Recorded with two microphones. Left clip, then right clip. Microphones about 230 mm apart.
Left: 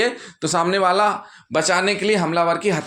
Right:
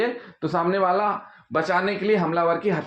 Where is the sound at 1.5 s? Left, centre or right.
Left.